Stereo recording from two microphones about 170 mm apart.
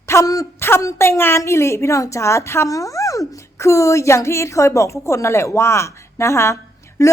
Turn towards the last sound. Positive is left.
turn(degrees=15)  # may be behind; listen again after turning